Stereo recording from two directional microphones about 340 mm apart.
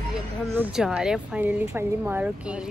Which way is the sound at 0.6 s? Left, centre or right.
Centre.